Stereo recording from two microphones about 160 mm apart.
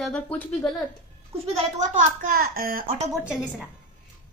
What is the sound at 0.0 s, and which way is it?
Speech, 5° left (ahead or behind).